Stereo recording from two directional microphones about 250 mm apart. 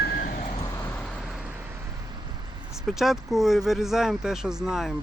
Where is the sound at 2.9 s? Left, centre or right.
Centre.